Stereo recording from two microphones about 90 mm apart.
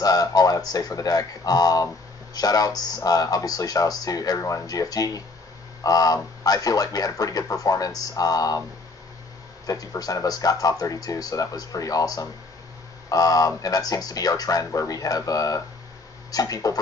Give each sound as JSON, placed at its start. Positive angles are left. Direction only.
{"t": 0.0, "sound": "speech", "side_deg": 45}
{"t": 9.7, "sound": "speech", "side_deg": 45}